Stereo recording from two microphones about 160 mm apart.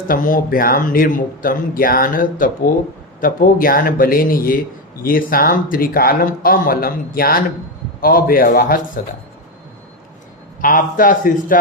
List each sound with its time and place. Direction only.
0.1 s speech: 60° left (ahead or behind)
10.6 s speech: 60° left (ahead or behind)